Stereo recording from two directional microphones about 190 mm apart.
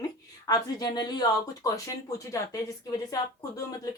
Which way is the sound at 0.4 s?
20° left (ahead or behind).